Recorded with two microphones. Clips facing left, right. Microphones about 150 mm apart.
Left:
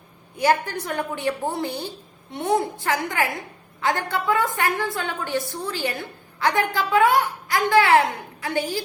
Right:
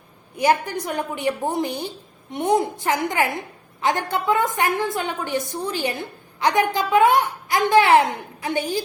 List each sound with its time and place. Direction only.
0.3 s a woman's voice: 15° right (ahead or behind)